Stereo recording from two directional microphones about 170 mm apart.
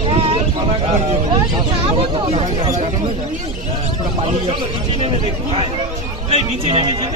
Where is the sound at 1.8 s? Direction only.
35° right (ahead or behind).